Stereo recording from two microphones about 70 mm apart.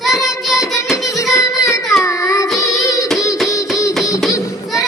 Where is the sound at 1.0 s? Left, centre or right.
Left.